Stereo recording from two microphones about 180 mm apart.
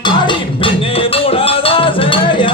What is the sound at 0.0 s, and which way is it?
Music, 30° left (ahead or behind).